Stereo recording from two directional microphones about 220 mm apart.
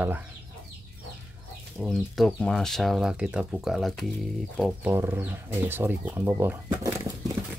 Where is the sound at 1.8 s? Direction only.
Centre (ahead or behind).